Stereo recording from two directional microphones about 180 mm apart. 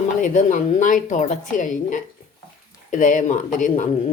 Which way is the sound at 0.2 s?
45° left (ahead or behind).